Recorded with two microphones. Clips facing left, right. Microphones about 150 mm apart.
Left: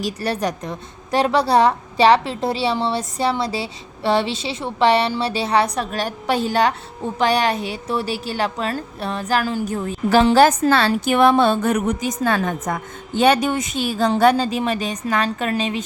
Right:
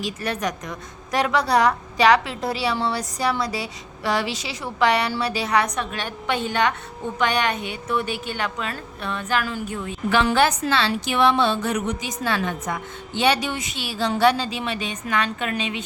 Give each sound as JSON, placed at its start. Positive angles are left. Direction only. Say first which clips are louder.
{"t": 0.0, "sound": "a woman's voice", "louder": "left 4 dB", "side_deg": 35}